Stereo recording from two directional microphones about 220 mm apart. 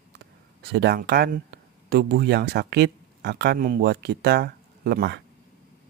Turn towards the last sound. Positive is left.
turn(degrees=-45)  # may be behind; listen again after turning